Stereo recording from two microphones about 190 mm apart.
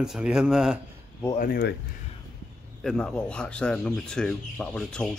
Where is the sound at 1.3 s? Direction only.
50° left (ahead or behind).